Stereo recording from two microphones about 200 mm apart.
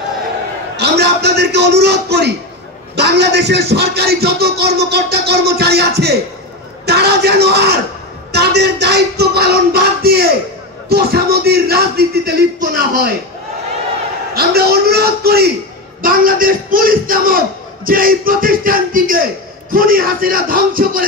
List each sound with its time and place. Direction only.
0.7 s a man's voice: 55° right (ahead or behind)
14.3 s speech: 50° right (ahead or behind)